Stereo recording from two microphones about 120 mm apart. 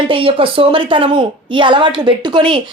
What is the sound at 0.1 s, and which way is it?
A woman's voice, 50° right (ahead or behind).